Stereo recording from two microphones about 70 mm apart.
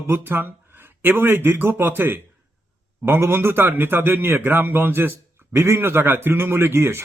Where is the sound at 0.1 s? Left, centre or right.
Right.